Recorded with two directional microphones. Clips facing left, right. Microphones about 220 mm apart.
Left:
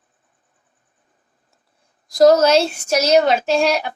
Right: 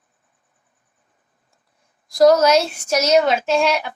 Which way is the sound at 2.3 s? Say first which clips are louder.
Left 1 dB; 30° left (ahead or behind).